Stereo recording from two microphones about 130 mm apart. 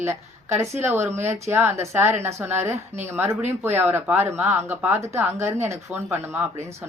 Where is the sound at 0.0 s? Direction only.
20° right (ahead or behind).